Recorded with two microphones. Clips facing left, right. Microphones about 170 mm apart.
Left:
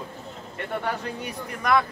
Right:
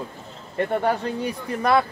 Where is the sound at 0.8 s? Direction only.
30° right (ahead or behind).